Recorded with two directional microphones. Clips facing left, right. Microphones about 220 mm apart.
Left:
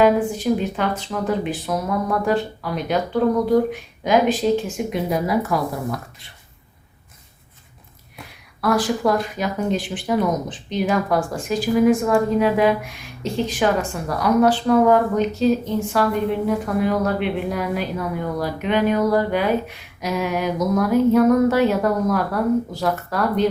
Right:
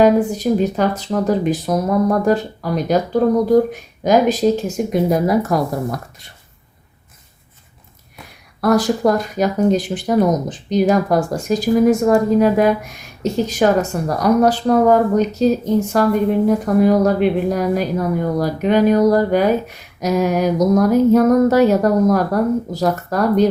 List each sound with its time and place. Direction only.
0.0 s speech: 40° right (ahead or behind)
8.6 s speech: 40° right (ahead or behind)